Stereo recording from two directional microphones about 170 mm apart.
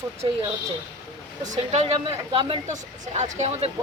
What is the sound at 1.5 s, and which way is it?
Speech, 40° right (ahead or behind).